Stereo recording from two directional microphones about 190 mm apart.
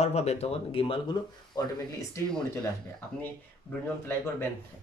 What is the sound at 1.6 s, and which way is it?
Speech, 15° left (ahead or behind).